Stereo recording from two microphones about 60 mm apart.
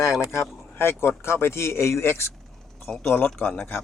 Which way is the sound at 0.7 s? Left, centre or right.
Left.